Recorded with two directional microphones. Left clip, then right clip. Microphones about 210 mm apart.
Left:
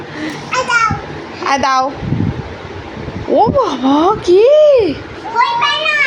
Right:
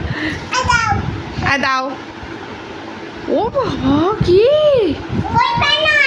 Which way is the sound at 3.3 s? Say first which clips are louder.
Left 6 dB; 5° left (ahead or behind).